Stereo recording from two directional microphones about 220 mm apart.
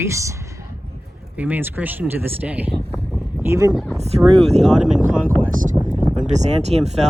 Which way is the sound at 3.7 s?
Centre (ahead or behind).